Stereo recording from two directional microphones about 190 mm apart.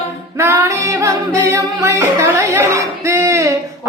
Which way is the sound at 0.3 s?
15° right (ahead or behind).